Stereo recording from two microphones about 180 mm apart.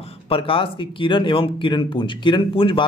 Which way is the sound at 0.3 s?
30° left (ahead or behind).